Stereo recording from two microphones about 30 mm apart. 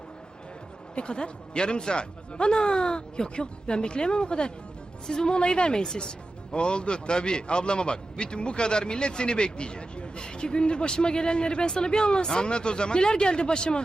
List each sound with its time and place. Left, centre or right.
0.9 s speech: left